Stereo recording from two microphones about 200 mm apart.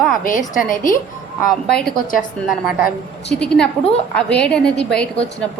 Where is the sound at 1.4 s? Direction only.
Centre (ahead or behind).